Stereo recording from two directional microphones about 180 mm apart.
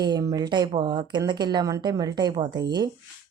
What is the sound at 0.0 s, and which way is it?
A woman's voice, 20° right (ahead or behind).